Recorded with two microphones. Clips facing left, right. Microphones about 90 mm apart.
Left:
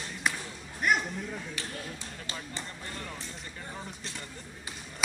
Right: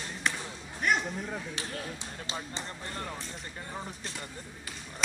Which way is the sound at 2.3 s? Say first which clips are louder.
Right 2 dB; 20° right (ahead or behind).